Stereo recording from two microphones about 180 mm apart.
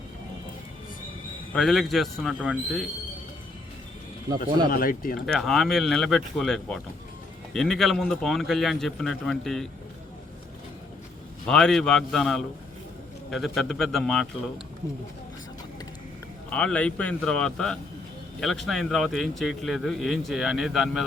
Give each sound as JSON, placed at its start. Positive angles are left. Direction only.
{"t": 1.5, "sound": "speech", "side_deg": 0}
{"t": 4.7, "sound": "speech", "side_deg": 55}
{"t": 5.2, "sound": "speech", "side_deg": 0}
{"t": 11.4, "sound": "speech", "side_deg": 5}
{"t": 16.5, "sound": "speech", "side_deg": 5}